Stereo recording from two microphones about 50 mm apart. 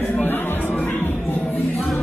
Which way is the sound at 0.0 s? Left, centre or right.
Left.